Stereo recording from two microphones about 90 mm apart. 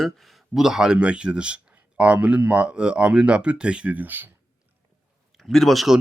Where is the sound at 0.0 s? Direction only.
Centre (ahead or behind); by 4.3 s 20° right (ahead or behind).